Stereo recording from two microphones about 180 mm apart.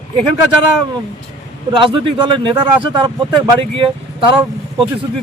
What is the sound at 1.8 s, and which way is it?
Speech, 30° right (ahead or behind).